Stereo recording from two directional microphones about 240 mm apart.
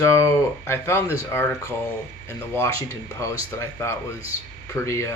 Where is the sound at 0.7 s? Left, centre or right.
Centre.